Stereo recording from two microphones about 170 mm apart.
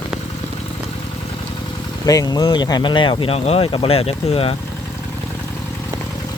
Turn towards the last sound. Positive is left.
turn(degrees=35)  # may be behind; listen again after turning